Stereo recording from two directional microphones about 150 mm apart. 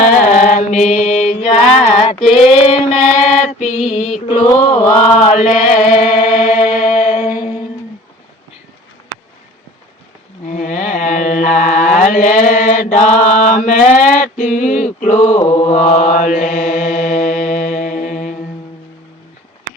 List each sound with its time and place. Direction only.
0.0 s mantra: 55° left (ahead or behind)
2.2 s female singing: 45° left (ahead or behind)
3.8 s chant: 45° left (ahead or behind)
5.2 s chant: 50° left (ahead or behind)
6.4 s music: 50° left (ahead or behind)
6.7 s mantra: 45° left (ahead or behind)
10.4 s mantra: 55° left (ahead or behind)